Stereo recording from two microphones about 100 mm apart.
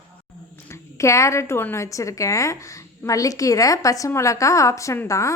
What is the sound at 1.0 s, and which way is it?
A woman's voice, 30° left (ahead or behind).